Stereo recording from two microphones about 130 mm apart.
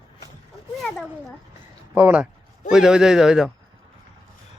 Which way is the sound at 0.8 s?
5° left (ahead or behind).